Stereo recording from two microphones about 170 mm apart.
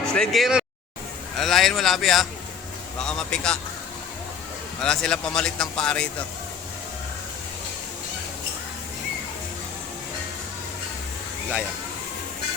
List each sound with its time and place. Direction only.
0.1 s speech: centre (ahead or behind)
4.8 s speech: 5° left (ahead or behind)